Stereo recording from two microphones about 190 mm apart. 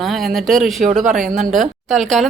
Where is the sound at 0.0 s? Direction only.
Centre (ahead or behind).